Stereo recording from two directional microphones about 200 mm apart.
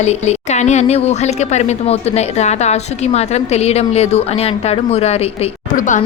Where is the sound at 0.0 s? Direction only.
35° left (ahead or behind).